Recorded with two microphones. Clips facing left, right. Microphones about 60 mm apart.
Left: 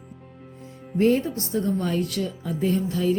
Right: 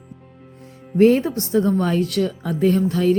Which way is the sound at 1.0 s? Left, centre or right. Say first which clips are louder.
Right 6 dB; right.